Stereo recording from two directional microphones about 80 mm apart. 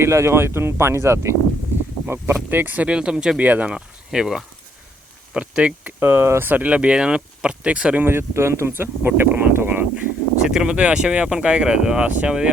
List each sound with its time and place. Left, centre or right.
0.0 s speech: right
2.3 s speech: right
6.0 s speech: right
6.5 s speech: centre
8.0 s speech: right
10.4 s speech: centre